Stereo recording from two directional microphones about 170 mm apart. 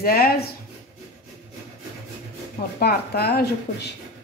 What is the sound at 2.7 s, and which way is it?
Speech, 65° left (ahead or behind).